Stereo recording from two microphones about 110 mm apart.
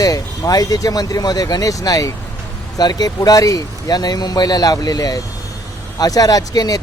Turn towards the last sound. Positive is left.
turn(degrees=35)  # may be behind; listen again after turning